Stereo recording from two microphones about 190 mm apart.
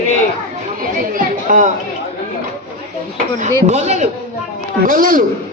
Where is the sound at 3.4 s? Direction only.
35° right (ahead or behind).